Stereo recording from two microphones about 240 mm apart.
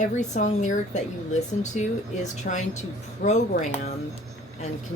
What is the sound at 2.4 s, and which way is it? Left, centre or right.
Speech, left.